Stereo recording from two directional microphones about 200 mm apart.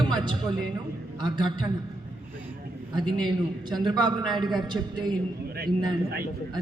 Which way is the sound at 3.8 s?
20° right (ahead or behind).